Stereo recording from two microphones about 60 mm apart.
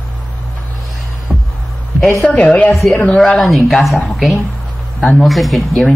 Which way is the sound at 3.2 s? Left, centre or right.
Centre.